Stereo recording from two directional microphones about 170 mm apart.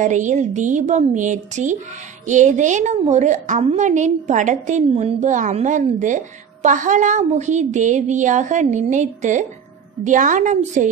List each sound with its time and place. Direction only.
0.0 s a woman's voice: 45° right (ahead or behind)